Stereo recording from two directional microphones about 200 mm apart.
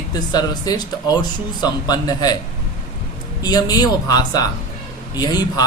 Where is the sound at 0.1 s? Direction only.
20° left (ahead or behind).